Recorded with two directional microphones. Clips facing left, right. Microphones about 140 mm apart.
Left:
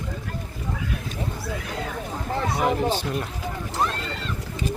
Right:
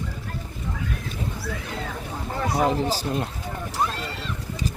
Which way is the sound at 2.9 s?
30° right (ahead or behind).